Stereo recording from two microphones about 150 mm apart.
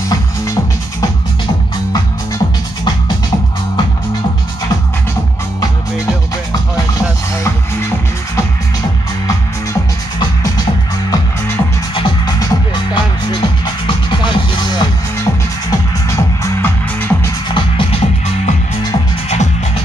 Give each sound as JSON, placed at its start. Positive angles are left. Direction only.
{"t": 1.9, "sound": "music", "side_deg": 25}
{"t": 10.1, "sound": "music", "side_deg": 25}
{"t": 17.5, "sound": "music", "side_deg": 35}
{"t": 19.2, "sound": "music", "side_deg": 50}